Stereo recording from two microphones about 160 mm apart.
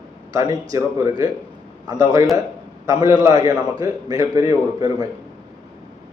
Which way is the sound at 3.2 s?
20° right (ahead or behind).